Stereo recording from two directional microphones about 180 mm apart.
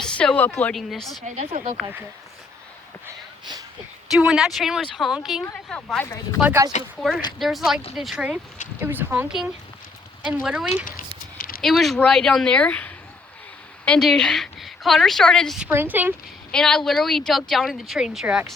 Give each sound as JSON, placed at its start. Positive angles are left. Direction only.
{"t": 0.0, "sound": "a woman's voice", "side_deg": 5}
{"t": 1.2, "sound": "speech", "side_deg": -40}
{"t": 4.1, "sound": "a woman's voice", "side_deg": 0}
{"t": 6.4, "sound": "a woman's voice", "side_deg": -10}
{"t": 11.3, "sound": "a sound", "side_deg": 50}
{"t": 11.6, "sound": "a woman's voice", "side_deg": 0}
{"t": 16.5, "sound": "a woman's voice", "side_deg": 5}